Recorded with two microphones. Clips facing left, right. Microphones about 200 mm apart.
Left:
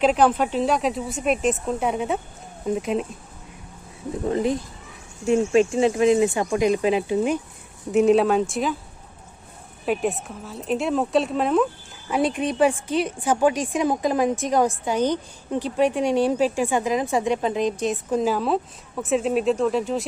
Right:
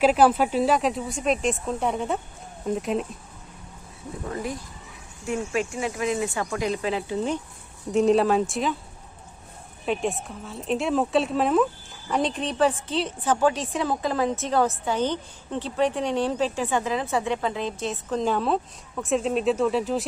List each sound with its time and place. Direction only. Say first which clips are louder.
0.0 s speech: even; 5° right (ahead or behind)
4.3 s speech: left 9 dB; 25° left (ahead or behind)
7.9 s speech: left 2 dB; 5° left (ahead or behind)
9.8 s speech: left 3 dB; 5° left (ahead or behind)
12.1 s a woman's voice: left 3 dB; 10° left (ahead or behind)